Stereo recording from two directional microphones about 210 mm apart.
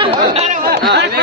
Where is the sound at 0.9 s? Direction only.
55° right (ahead or behind).